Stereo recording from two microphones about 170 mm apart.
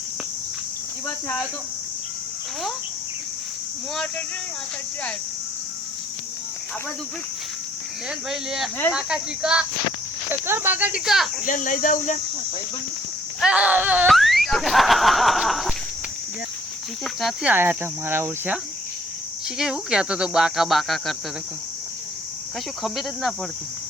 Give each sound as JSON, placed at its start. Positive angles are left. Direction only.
{"t": 8.3, "sound": "speech", "side_deg": 0}
{"t": 11.4, "sound": "speech", "side_deg": 50}
{"t": 13.4, "sound": "speech", "side_deg": -5}
{"t": 14.1, "sound": "a sound", "side_deg": 0}
{"t": 17.0, "sound": "speech", "side_deg": 0}
{"t": 17.5, "sound": "speech", "side_deg": -10}
{"t": 22.8, "sound": "speech", "side_deg": 0}